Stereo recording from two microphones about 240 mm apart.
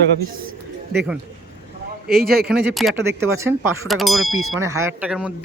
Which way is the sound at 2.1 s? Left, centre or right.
Right.